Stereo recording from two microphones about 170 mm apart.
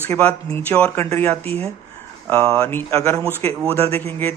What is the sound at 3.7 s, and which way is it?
Speech, 35° right (ahead or behind).